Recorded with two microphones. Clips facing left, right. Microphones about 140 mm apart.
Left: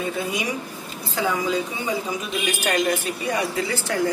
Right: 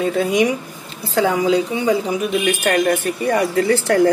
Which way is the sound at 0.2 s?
75° right (ahead or behind).